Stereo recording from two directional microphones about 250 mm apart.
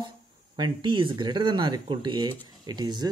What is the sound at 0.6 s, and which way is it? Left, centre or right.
Speech, centre.